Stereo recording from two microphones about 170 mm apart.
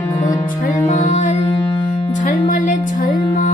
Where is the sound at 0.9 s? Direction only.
45° left (ahead or behind).